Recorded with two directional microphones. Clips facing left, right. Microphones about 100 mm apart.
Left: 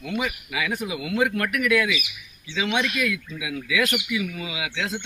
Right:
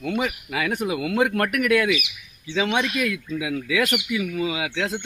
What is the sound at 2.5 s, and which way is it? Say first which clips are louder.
A man's voice: right 2 dB; 40° right (ahead or behind).